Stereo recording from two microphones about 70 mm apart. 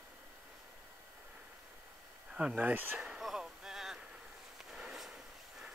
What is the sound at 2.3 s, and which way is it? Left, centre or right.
Speech, centre.